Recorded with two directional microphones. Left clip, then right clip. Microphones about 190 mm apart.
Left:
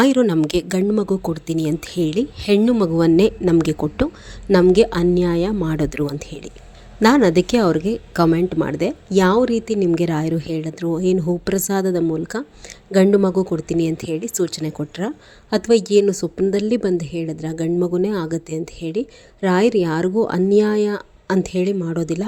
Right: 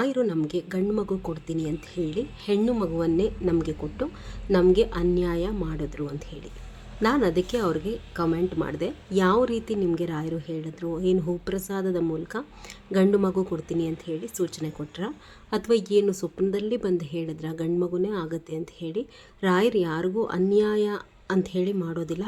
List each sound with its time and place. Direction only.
0.0 s a woman's voice: 45° left (ahead or behind)
0.9 s a woman's voice: 35° left (ahead or behind)